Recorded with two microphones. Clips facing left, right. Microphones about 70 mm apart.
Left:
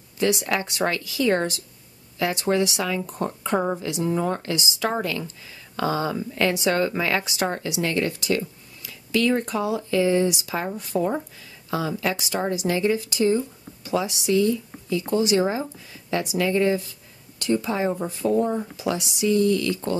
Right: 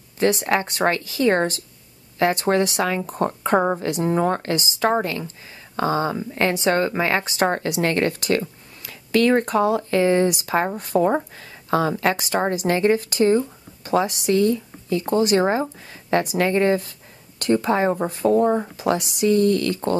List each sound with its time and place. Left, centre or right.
0.2 s a woman's voice: right